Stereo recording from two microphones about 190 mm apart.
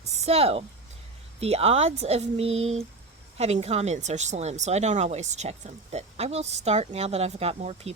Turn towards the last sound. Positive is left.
turn(degrees=-35)  # may be behind; listen again after turning